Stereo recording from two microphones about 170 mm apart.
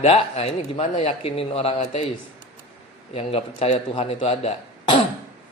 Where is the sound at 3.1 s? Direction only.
35° left (ahead or behind).